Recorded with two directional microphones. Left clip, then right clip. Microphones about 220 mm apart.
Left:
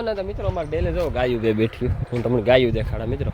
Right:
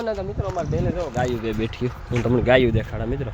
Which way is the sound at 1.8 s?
Centre (ahead or behind).